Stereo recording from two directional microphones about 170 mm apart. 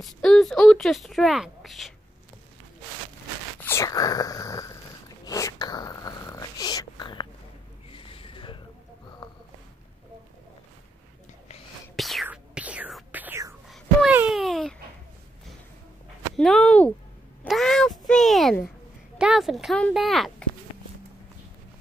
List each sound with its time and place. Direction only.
0.0 s speech: centre (ahead or behind)
3.6 s speech: 20° left (ahead or behind)
5.2 s dog: 20° left (ahead or behind)
7.9 s a sound: 30° left (ahead or behind)
11.9 s whispering: centre (ahead or behind)
13.7 s a sound: 5° right (ahead or behind)
16.3 s speech: 5° left (ahead or behind)